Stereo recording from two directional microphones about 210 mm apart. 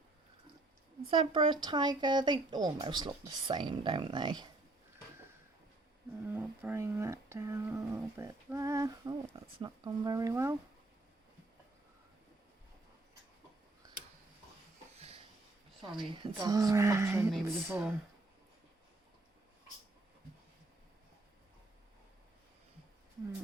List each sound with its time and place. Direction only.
1.1 s speech: 25° right (ahead or behind)
6.3 s speech: 10° right (ahead or behind)
14.9 s wheeze: 30° right (ahead or behind)
16.0 s speech: 20° right (ahead or behind)